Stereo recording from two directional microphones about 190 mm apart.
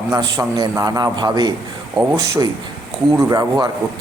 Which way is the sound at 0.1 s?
20° right (ahead or behind).